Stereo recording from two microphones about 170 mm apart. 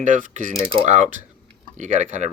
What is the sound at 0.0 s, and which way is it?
Mechanisms, 50° right (ahead or behind).